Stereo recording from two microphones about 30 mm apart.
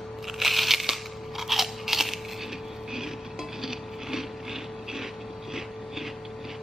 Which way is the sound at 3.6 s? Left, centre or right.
Centre.